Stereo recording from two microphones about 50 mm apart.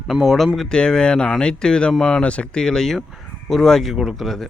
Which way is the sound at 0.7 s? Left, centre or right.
Centre.